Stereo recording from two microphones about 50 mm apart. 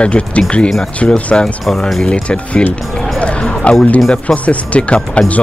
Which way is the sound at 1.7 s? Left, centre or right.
Centre.